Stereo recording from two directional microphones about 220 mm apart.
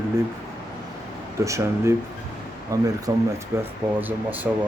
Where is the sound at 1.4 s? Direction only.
15° right (ahead or behind).